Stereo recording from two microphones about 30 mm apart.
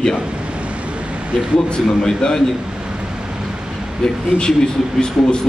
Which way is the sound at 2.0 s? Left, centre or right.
Left.